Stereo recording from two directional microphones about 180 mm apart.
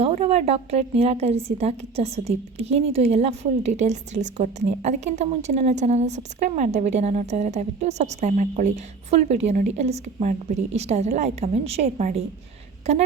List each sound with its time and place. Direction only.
0.0 s a woman's voice: 35° right (ahead or behind)